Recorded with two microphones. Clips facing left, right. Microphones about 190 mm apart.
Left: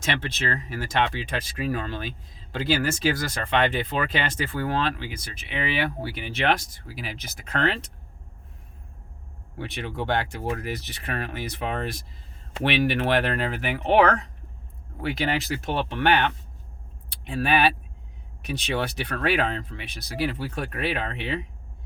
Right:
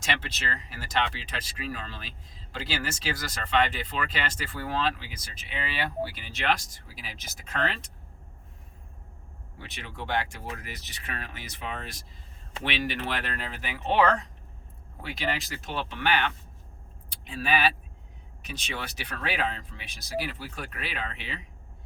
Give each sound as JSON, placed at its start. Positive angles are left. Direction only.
{"t": 0.0, "sound": "speech", "side_deg": 55}
{"t": 9.6, "sound": "speech", "side_deg": 60}